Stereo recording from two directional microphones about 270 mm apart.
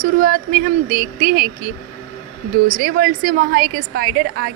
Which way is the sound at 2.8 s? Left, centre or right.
Right.